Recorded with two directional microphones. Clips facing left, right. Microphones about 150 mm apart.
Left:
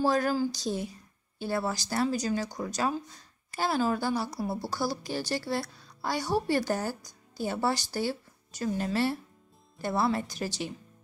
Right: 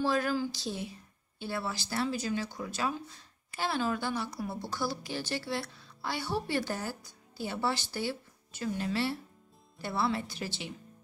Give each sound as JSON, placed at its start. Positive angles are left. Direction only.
{"t": 0.0, "sound": "a woman's voice", "side_deg": 40}